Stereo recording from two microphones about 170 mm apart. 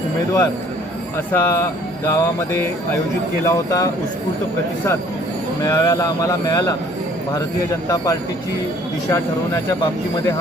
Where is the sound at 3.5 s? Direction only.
20° left (ahead or behind).